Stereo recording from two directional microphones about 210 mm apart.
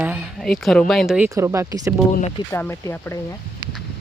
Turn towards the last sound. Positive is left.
turn(degrees=10)  # may be behind; listen again after turning